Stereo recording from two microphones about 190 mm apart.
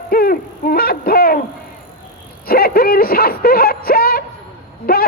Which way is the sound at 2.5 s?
50° left (ahead or behind).